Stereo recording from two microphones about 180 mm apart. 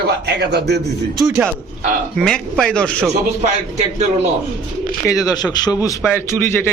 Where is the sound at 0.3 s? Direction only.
65° right (ahead or behind).